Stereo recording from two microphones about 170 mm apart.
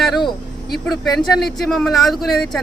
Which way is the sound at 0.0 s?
Centre (ahead or behind).